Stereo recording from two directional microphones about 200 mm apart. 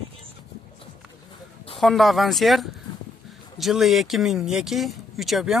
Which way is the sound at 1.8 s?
Centre (ahead or behind).